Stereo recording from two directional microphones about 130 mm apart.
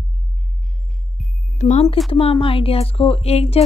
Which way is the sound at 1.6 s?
65° left (ahead or behind).